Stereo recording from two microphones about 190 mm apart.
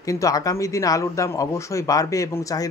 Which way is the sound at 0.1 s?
15° left (ahead or behind).